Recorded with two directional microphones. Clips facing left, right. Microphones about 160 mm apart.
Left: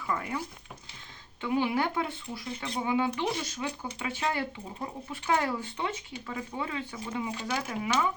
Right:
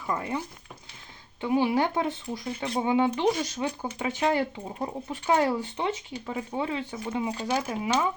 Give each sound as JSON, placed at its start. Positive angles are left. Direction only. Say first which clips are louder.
{"t": 0.1, "sound": "speech", "louder": "right 3 dB", "side_deg": -25}
{"t": 1.4, "sound": "speech", "louder": "right 4 dB", "side_deg": -20}
{"t": 2.3, "sound": "speech", "louder": "right 5 dB", "side_deg": -40}